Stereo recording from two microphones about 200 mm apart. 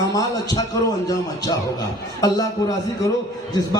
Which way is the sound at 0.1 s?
15° left (ahead or behind).